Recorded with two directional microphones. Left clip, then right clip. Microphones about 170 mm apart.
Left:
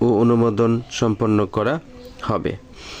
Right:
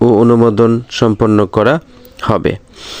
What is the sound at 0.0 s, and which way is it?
A man's voice, 25° right (ahead or behind).